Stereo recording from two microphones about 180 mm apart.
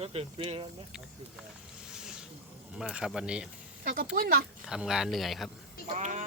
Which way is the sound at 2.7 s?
5° right (ahead or behind).